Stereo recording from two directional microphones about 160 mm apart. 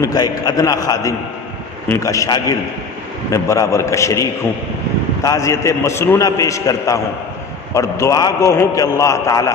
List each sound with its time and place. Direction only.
0.0 s a man's voice: 25° left (ahead or behind)